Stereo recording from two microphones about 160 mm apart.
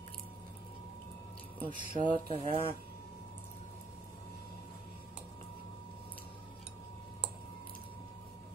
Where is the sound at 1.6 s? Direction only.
55° right (ahead or behind).